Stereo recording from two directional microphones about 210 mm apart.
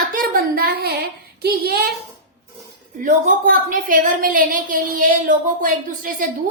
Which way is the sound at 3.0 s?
40° right (ahead or behind).